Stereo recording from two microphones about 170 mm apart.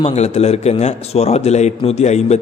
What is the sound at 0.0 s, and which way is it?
A man's voice, 40° left (ahead or behind).